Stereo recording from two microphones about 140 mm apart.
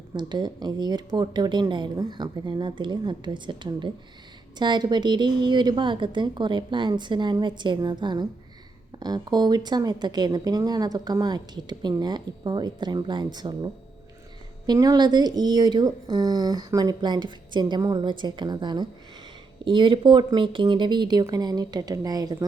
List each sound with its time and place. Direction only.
0.1 s speech: 30° right (ahead or behind)
14.7 s speech: 30° right (ahead or behind)